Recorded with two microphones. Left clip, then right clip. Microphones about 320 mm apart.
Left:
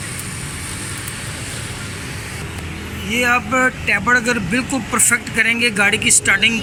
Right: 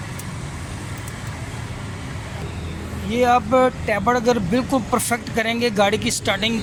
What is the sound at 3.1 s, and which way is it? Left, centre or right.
Speech, centre.